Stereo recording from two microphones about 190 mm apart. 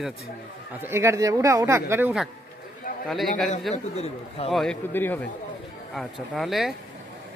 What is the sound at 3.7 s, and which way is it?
Speech, 30° left (ahead or behind).